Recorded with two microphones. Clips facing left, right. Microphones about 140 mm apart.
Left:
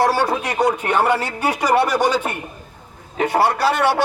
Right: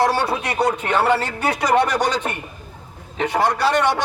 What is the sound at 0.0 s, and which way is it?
A man's voice, 10° left (ahead or behind).